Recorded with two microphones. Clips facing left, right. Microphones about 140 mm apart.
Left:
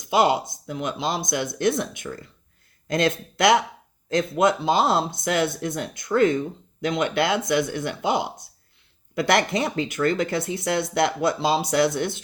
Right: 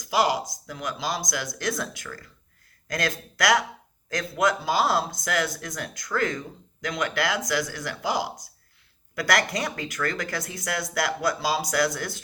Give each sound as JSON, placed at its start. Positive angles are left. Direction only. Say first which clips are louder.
{"t": 0.0, "sound": "speech", "louder": "left 4 dB", "side_deg": 25}